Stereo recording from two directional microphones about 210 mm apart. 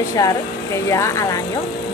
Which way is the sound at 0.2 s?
15° left (ahead or behind).